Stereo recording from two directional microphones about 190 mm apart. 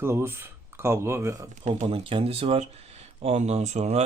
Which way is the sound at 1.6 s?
35° right (ahead or behind).